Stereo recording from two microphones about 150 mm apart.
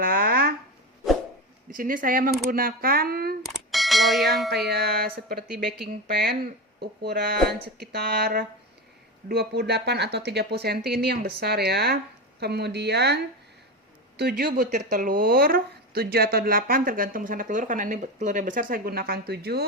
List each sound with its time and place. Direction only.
0.0 s a sound: 75° right (ahead or behind)
1.7 s speech: 65° right (ahead or behind); by 3.3 s 85° right
3.7 s bell: centre (ahead or behind)
4.4 s speech: 90° right
14.2 s speech: 90° right